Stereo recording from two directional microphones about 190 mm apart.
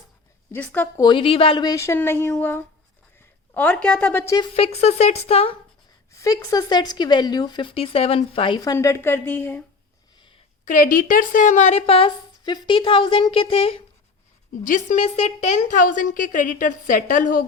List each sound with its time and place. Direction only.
0.5 s a woman's voice: 10° left (ahead or behind)
1.0 s a woman's voice: 25° left (ahead or behind); by 4.4 s 10° left (ahead or behind)
4.4 s speech: 30° left (ahead or behind)
6.1 s speech: 15° left (ahead or behind)
10.7 s speech: 45° left (ahead or behind)
14.6 s a woman's voice: 45° left (ahead or behind)